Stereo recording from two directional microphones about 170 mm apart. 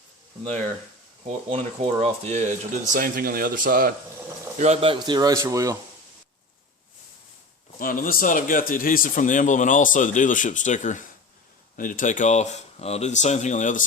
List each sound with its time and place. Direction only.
1.3 s speech: 35° right (ahead or behind); by 3.9 s 55° right (ahead or behind)
4.5 s speech: 40° right (ahead or behind); by 5.7 s 20° right (ahead or behind)
7.8 s speech: 55° left (ahead or behind)